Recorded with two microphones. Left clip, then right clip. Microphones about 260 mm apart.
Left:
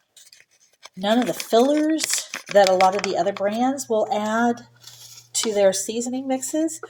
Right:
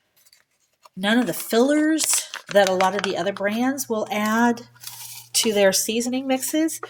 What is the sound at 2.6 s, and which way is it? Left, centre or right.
Speech, right.